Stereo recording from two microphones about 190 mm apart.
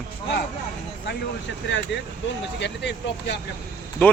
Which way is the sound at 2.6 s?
65° left (ahead or behind).